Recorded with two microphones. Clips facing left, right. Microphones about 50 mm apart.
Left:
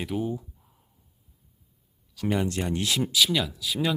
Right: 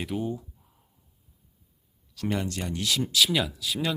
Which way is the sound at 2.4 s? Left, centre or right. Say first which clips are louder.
Left 3 dB; left.